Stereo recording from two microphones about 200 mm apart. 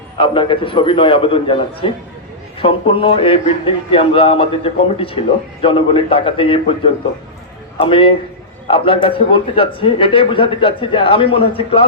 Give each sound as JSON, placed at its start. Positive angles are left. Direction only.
{"t": 0.2, "sound": "a man's voice", "side_deg": 25}